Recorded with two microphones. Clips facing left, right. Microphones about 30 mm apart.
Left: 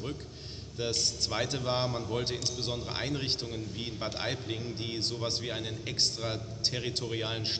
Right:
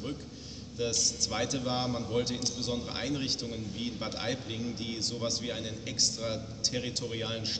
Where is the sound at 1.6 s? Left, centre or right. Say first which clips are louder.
Left 1 dB; centre.